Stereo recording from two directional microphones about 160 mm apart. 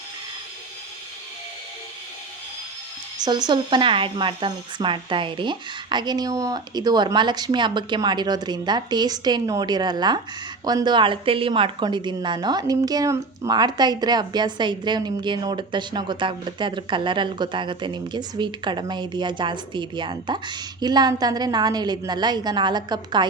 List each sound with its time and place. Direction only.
3.2 s a woman's voice: 25° right (ahead or behind)